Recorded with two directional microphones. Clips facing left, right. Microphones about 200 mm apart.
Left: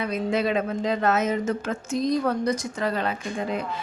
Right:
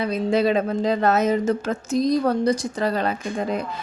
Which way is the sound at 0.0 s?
35° right (ahead or behind).